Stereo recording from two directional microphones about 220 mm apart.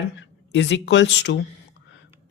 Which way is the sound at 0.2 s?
55° left (ahead or behind).